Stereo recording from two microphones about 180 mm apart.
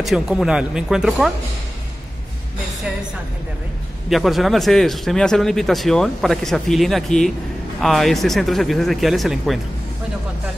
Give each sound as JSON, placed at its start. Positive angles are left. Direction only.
{"t": 0.0, "sound": "a man's voice", "side_deg": 0}
{"t": 4.1, "sound": "a man's voice", "side_deg": 0}